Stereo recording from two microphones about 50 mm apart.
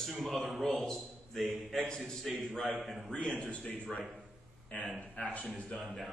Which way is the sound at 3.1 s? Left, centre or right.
Centre.